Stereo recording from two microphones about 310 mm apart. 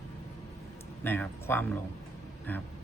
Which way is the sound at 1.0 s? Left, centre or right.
Centre.